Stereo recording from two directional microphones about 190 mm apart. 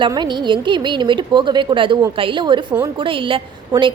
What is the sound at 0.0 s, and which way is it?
A woman's voice, 25° right (ahead or behind).